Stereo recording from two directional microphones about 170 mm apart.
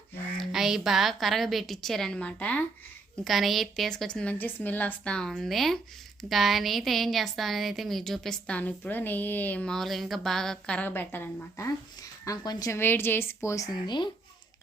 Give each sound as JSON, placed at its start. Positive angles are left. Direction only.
{"t": 0.3, "sound": "a woman's voice", "side_deg": 0}